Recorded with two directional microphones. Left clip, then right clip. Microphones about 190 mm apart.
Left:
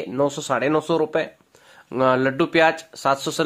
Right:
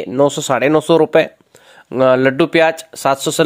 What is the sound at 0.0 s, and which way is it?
Speech, 30° right (ahead or behind).